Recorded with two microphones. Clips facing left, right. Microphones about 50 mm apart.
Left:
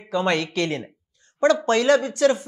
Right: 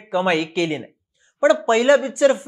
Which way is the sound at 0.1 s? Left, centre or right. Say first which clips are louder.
Right 3 dB; centre.